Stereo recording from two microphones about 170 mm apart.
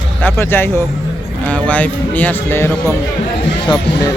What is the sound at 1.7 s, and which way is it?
Speech, 10° left (ahead or behind).